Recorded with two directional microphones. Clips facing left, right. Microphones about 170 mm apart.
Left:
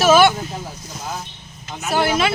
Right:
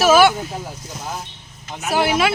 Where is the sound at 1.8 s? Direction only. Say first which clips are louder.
Right 1 dB; 10° right (ahead or behind).